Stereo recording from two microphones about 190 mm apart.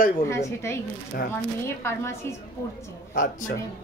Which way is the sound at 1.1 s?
55° left (ahead or behind).